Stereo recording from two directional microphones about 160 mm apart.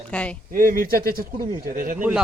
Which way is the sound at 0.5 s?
60° right (ahead or behind).